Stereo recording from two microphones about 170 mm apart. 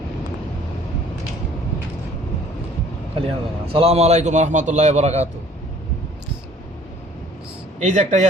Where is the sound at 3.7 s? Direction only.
35° right (ahead or behind).